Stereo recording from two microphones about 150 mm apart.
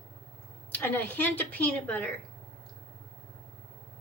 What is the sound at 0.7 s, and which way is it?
A woman's voice, 10° left (ahead or behind).